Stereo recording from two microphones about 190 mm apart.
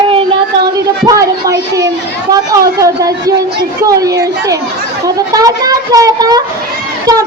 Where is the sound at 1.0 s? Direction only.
20° right (ahead or behind).